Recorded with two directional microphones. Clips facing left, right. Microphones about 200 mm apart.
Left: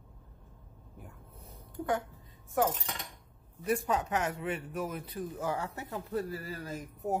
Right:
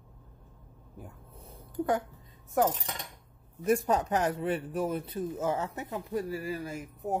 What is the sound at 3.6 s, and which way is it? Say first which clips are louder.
A man's voice: right 4 dB; 40° right (ahead or behind).